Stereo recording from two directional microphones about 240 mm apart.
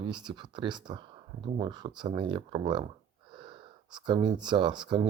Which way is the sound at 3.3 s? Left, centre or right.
Centre.